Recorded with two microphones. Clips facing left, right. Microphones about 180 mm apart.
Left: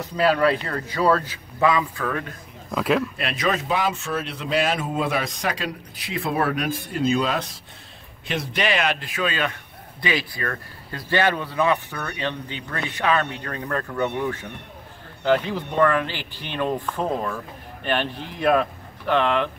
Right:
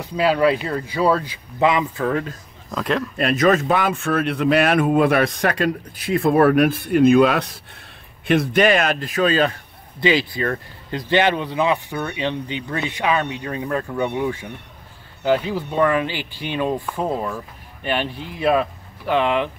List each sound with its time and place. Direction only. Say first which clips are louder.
0.0 s speech: right 2 dB; 10° right (ahead or behind); by 2.3 s 30° right (ahead or behind)
2.7 s speech: left 1 dB; 5° left (ahead or behind)
3.2 s speech: right 8 dB; 45° right (ahead or behind); by 7.5 s 65° right (ahead or behind)
8.3 s a man's voice: right 8 dB; 50° right (ahead or behind); by 19.5 s 10° right (ahead or behind)